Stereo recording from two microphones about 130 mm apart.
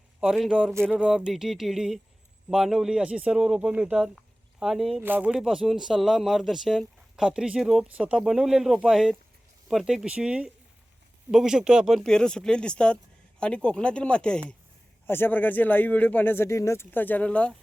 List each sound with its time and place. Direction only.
0.2 s speech: 5° right (ahead or behind)
0.7 s a sound: 20° right (ahead or behind)
0.9 s speech: 5° right (ahead or behind)
4.9 s speech: 15° right (ahead or behind); by 17.5 s 10° left (ahead or behind)